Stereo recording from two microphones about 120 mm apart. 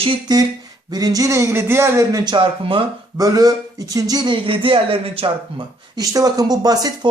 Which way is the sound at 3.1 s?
30° right (ahead or behind).